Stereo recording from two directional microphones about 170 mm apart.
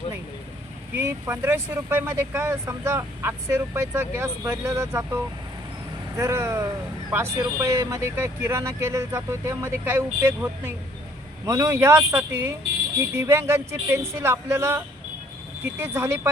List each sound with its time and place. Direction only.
0.9 s speech: 15° right (ahead or behind)
15.8 s speech: 15° right (ahead or behind)